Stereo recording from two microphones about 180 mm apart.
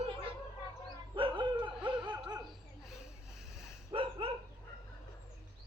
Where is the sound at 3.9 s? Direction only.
30° right (ahead or behind).